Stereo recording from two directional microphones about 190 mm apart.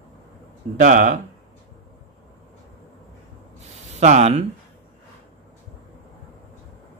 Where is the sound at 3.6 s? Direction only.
35° right (ahead or behind).